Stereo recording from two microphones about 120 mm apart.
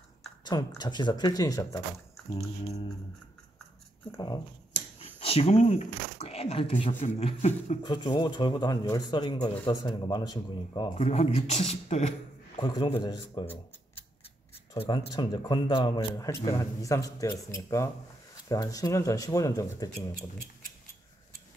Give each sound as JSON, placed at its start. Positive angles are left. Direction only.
{"t": 0.4, "sound": "a man's voice", "side_deg": 35}
{"t": 2.6, "sound": "speech", "side_deg": 60}
{"t": 4.9, "sound": "speech", "side_deg": 55}
{"t": 6.9, "sound": "speech", "side_deg": 80}
{"t": 7.2, "sound": "speech", "side_deg": 65}
{"t": 7.8, "sound": "a man's voice", "side_deg": 40}
{"t": 11.0, "sound": "speech", "side_deg": 65}
{"t": 12.5, "sound": "a man's voice", "side_deg": 40}
{"t": 14.8, "sound": "a man's voice", "side_deg": 40}
{"t": 16.2, "sound": "speech", "side_deg": 30}